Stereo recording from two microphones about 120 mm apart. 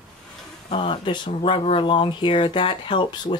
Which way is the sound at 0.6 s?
50° left (ahead or behind).